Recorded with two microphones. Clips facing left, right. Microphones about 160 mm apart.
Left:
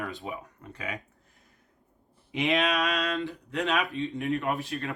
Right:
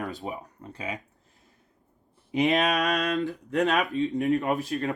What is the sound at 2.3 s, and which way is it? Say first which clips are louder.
Speech: right 3 dB; 40° right (ahead or behind).